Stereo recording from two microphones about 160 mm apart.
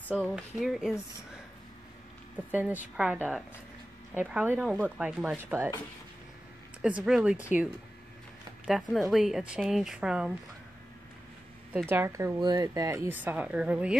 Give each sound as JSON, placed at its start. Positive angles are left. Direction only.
{"t": 0.1, "sound": "a woman's voice", "side_deg": 0}
{"t": 2.3, "sound": "a woman's voice", "side_deg": -10}
{"t": 6.8, "sound": "a woman's voice", "side_deg": -5}
{"t": 11.7, "sound": "speech", "side_deg": -15}